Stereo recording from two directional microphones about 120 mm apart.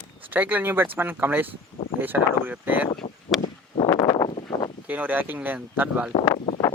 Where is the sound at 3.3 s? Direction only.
Centre (ahead or behind).